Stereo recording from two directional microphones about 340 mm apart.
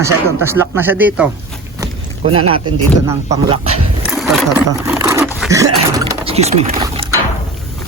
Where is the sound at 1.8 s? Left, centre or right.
Centre.